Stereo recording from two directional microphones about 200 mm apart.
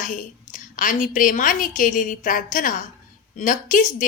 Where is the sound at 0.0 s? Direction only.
40° left (ahead or behind).